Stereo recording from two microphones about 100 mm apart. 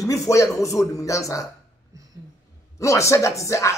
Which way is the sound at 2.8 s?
30° left (ahead or behind).